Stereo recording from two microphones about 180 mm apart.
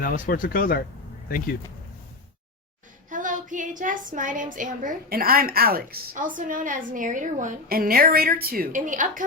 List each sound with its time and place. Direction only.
0.0 s speech: 50° left (ahead or behind)
3.1 s a sound: 45° right (ahead or behind)
4.5 s a woman's voice: 45° right (ahead or behind)